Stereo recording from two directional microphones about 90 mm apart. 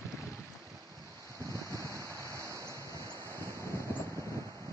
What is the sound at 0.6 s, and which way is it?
Waves, 40° right (ahead or behind).